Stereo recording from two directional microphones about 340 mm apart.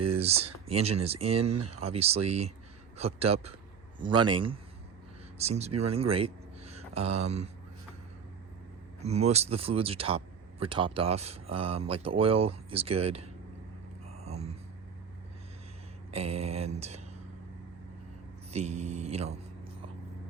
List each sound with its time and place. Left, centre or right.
0.0 s speech: centre
1.5 s speech: right
1.7 s speech: centre
9.0 s speech: centre
14.1 s a sound: centre
16.1 s speech: centre
18.5 s speech: centre